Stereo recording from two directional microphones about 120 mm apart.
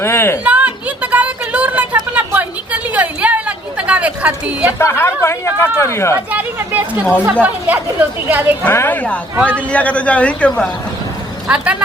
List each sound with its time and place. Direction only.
0.0 s speech: 20° left (ahead or behind)
0.4 s a sound: 10° right (ahead or behind)
4.8 s speech: 20° left (ahead or behind)
6.3 s speech: 15° right (ahead or behind)
8.6 s a man's voice: 15° left (ahead or behind)
11.4 s speech: 10° right (ahead or behind)